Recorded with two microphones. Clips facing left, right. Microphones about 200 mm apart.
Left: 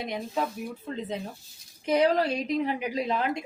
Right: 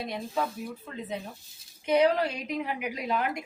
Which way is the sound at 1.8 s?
35° left (ahead or behind).